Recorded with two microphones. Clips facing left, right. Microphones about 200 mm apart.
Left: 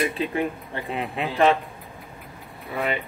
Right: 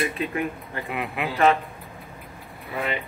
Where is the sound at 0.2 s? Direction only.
30° left (ahead or behind).